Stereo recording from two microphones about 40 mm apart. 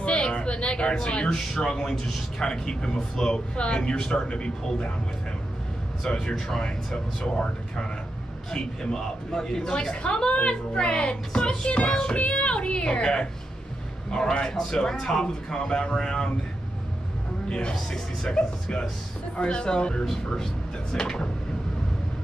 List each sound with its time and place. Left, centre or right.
0.0 s a sound: left
1.3 s a man's voice: centre
3.5 s speech: left
3.8 s a man's voice: centre
6.0 s a man's voice: centre
7.3 s a man's voice: left
10.0 s speech: left
14.3 s a man's voice: centre
17.5 s speech: left
17.7 s a man's voice: centre
18.3 s speech: left